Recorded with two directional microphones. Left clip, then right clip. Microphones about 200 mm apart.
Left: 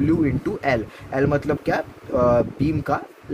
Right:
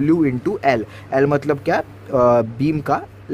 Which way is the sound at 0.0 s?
30° right (ahead or behind).